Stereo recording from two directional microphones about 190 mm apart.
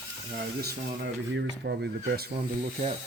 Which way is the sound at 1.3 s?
65° right (ahead or behind).